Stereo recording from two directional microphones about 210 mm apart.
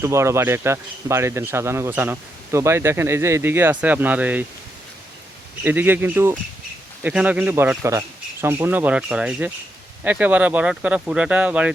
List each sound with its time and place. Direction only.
0.0 s speech: 15° right (ahead or behind)
5.6 s speech: 10° right (ahead or behind)